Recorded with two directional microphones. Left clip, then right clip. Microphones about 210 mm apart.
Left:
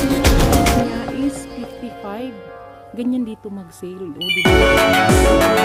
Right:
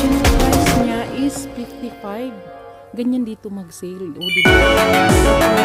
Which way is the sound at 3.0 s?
30° right (ahead or behind).